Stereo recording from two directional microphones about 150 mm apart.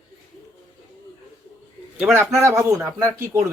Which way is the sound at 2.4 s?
20° right (ahead or behind).